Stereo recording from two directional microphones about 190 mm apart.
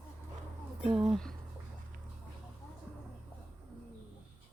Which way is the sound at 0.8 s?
5° right (ahead or behind).